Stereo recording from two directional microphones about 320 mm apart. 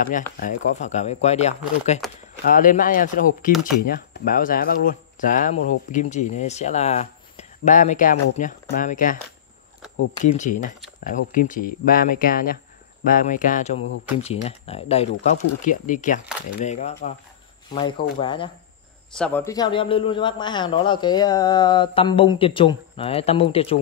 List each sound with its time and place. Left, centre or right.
0.0 s speech: left
2.0 s speech: centre
2.4 s speech: left
10.2 s a man's voice: left
19.1 s a man's voice: centre